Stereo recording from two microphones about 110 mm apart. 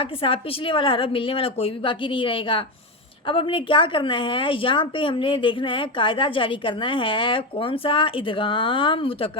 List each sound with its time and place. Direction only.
0.0 s a woman's voice: 55° left (ahead or behind)